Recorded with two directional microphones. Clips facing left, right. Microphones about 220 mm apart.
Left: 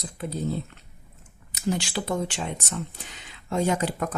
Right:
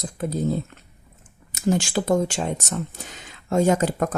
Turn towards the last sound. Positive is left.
turn(degrees=-45)  # may be behind; listen again after turning